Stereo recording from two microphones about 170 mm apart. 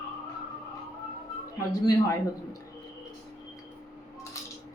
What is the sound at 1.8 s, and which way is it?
Speech, 20° left (ahead or behind).